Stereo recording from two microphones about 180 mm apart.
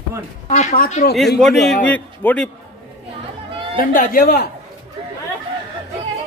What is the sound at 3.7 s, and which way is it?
Speech, 50° left (ahead or behind).